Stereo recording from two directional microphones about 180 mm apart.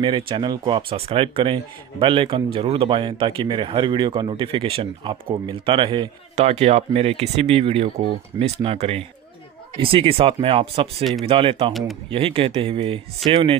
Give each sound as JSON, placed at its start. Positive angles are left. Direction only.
{"t": 0.0, "sound": "speech", "side_deg": -25}